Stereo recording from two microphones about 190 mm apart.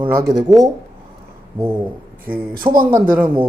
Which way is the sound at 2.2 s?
10° right (ahead or behind).